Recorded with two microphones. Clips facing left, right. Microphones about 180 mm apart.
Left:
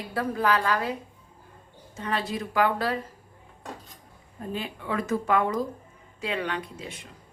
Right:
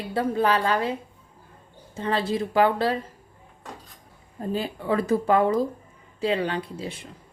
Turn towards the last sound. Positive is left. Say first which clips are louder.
# right 4 dB
turn(degrees=-30)  # may be behind; listen again after turning